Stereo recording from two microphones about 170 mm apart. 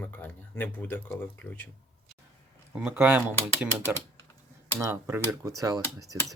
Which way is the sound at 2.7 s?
10° right (ahead or behind).